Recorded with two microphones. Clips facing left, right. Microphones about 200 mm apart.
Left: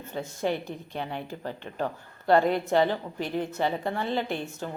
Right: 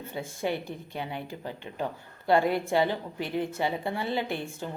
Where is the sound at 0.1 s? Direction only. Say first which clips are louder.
Left 2 dB; 10° right (ahead or behind).